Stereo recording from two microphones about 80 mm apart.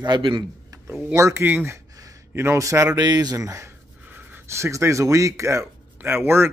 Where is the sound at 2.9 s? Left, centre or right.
Right.